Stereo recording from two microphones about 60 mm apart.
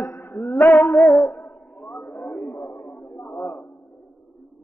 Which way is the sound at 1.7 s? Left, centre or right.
Centre.